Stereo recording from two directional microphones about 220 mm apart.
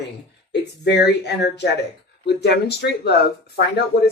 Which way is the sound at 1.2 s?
50° left (ahead or behind).